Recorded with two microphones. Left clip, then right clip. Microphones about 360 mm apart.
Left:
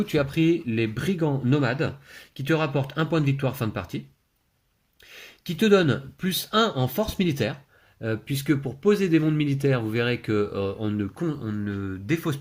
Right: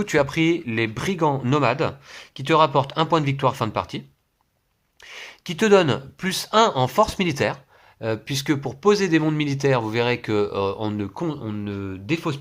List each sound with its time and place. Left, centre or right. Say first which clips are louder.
0.1 s speech: right 4 dB; centre
5.0 s speech: right 4 dB; centre